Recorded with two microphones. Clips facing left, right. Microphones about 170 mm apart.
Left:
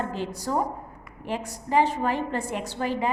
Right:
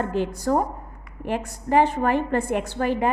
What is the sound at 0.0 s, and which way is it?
A woman's voice, 55° right (ahead or behind).